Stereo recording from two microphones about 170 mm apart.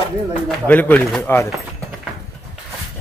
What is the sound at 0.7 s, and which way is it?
Speech, 10° left (ahead or behind).